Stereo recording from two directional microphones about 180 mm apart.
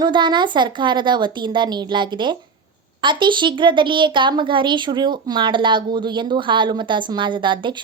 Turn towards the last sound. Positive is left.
turn(degrees=-25)  # may be behind; listen again after turning